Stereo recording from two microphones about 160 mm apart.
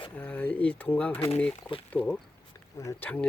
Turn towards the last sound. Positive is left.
turn(degrees=20)  # may be behind; listen again after turning